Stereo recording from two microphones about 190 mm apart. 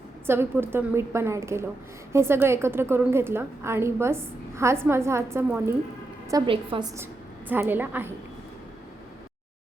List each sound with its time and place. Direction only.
0.3 s a woman's voice: 10° right (ahead or behind)
6.3 s a woman's voice: 25° right (ahead or behind); by 8.1 s 10° right (ahead or behind)